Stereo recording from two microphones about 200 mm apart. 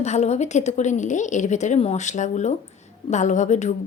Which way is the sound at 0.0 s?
35° left (ahead or behind).